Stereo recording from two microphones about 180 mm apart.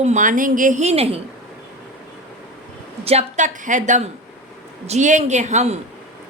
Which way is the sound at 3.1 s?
40° right (ahead or behind).